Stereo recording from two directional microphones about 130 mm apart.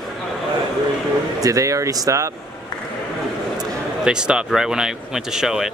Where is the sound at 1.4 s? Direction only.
25° right (ahead or behind).